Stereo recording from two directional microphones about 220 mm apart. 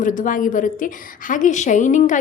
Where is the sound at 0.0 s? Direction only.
35° left (ahead or behind).